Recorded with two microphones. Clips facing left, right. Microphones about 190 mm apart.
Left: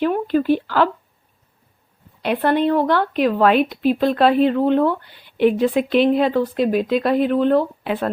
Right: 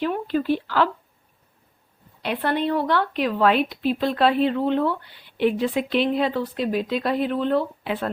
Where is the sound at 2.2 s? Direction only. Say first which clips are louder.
Left 6 dB; 50° left (ahead or behind).